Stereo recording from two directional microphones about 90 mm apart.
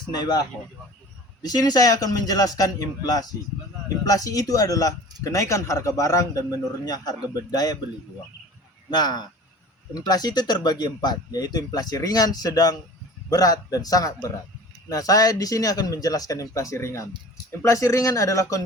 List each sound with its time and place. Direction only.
0.1 s speech: 50° left (ahead or behind)
6.8 s speech: 45° left (ahead or behind)
8.9 s speech: 50° left (ahead or behind); by 18.6 s 35° left (ahead or behind)